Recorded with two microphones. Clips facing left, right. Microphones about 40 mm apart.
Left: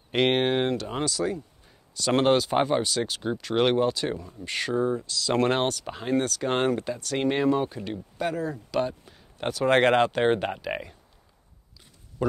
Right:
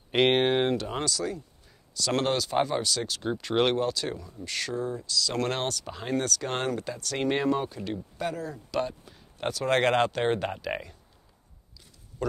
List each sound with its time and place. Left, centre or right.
0.1 s speech: centre
1.0 s speech: centre
3.2 s speech: centre
3.7 s speech: centre
7.0 s speech: centre
7.6 s speech: centre
12.2 s speech: centre